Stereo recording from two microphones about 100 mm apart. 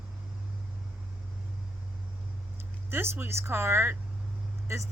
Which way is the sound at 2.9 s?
25° right (ahead or behind).